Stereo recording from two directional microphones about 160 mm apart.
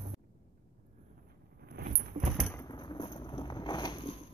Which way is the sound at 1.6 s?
70° right (ahead or behind).